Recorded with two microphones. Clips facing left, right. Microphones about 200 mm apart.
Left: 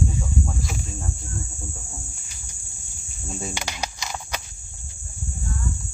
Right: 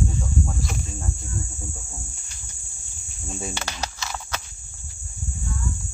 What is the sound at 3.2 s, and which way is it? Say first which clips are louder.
Cricket: even; centre (ahead or behind).